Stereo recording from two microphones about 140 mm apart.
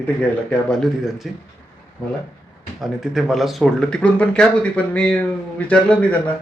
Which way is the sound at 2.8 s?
Centre (ahead or behind).